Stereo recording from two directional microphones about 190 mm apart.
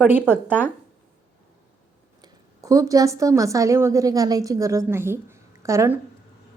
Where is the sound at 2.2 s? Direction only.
20° right (ahead or behind).